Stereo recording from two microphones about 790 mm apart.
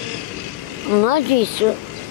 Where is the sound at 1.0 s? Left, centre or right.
Left.